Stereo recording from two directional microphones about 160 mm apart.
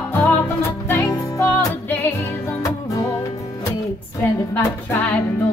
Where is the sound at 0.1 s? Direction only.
15° left (ahead or behind).